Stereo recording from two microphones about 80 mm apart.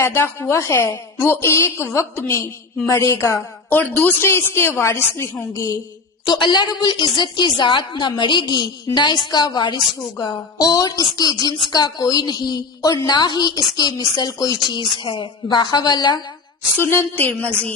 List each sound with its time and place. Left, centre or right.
0.0 s a woman's voice: left
3.7 s a woman's voice: left
6.4 s a woman's voice: left
14.7 s a woman's voice: left
16.7 s speech: left